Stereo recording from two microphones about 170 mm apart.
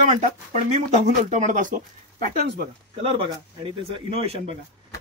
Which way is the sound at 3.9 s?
35° right (ahead or behind).